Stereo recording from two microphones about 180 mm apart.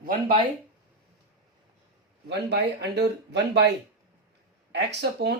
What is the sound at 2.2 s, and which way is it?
Speech, 70° right (ahead or behind).